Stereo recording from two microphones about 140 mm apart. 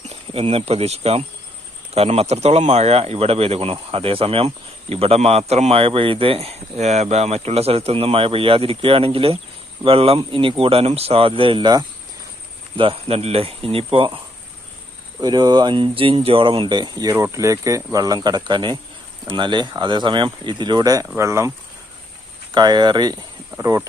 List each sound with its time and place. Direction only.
0.1 s speech: 45° right (ahead or behind)
15.2 s speech: 30° right (ahead or behind)
22.5 s speech: 30° right (ahead or behind)